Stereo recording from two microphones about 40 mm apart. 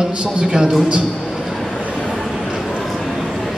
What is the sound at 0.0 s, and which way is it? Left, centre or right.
Speech, centre.